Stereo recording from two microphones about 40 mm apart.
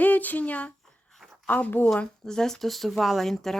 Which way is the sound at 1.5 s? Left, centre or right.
Left.